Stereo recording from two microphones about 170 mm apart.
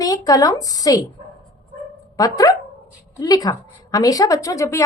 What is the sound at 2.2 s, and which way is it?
A woman's voice, 20° left (ahead or behind).